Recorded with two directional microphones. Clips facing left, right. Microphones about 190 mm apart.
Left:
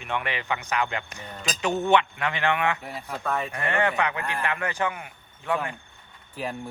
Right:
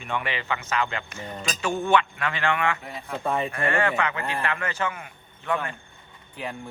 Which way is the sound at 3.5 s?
20° left (ahead or behind).